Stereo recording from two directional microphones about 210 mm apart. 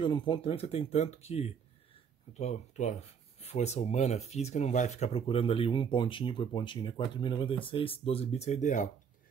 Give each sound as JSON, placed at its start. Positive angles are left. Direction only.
{"t": 0.0, "sound": "speech", "side_deg": 25}